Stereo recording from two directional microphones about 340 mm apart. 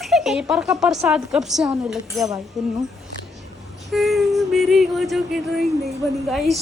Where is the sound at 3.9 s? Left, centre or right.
Centre.